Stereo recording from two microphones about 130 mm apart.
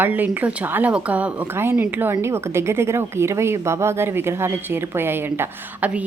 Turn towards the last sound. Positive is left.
turn(degrees=-10)  # may be behind; listen again after turning